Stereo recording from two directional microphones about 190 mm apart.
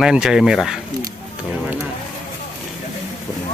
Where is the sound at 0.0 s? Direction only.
5° right (ahead or behind).